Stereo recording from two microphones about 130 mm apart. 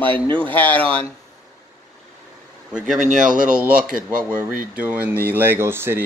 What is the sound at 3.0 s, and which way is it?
Speech, 75° right (ahead or behind).